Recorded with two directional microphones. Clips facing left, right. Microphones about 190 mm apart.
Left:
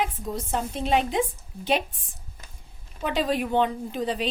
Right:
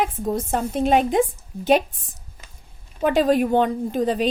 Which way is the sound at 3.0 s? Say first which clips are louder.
Right 8 dB; 45° right (ahead or behind).